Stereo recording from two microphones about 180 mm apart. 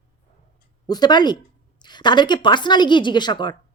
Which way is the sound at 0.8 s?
25° left (ahead or behind).